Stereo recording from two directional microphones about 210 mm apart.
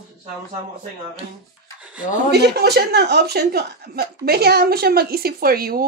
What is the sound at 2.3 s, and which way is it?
Speech, 50° right (ahead or behind).